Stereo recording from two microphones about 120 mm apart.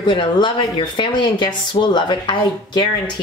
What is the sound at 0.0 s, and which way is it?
A woman's voice, 40° left (ahead or behind).